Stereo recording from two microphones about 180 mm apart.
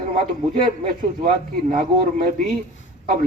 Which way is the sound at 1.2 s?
45° right (ahead or behind).